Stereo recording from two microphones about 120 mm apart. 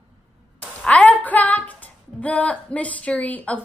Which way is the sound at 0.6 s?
10° left (ahead or behind).